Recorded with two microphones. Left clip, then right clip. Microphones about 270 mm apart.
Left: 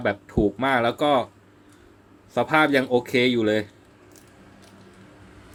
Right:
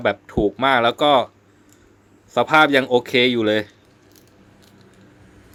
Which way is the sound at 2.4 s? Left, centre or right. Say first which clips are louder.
Right 5 dB; right.